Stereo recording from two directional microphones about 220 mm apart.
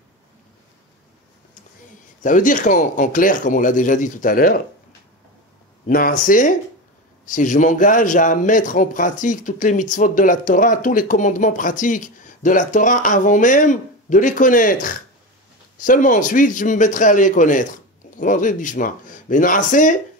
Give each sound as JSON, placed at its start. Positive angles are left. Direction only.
{"t": 2.2, "sound": "speech", "side_deg": 35}
{"t": 5.9, "sound": "speech", "side_deg": 40}